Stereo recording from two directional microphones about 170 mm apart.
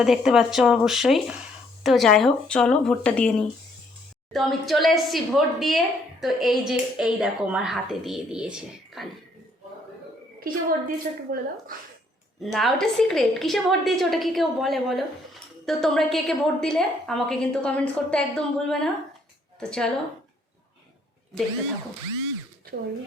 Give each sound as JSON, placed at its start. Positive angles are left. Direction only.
{"t": 0.0, "sound": "a woman's voice", "side_deg": 0}
{"t": 10.4, "sound": "a woman's voice", "side_deg": -60}
{"t": 12.4, "sound": "a woman's voice", "side_deg": 0}
{"t": 22.7, "sound": "speech", "side_deg": -75}